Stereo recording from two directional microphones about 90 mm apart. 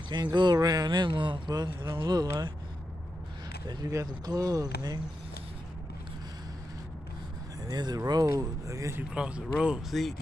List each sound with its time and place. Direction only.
0.1 s speech: 55° right (ahead or behind)
1.5 s speech: 50° right (ahead or behind)
3.6 s speech: 40° right (ahead or behind)
7.6 s speech: 50° right (ahead or behind)
9.1 s speech: 10° right (ahead or behind)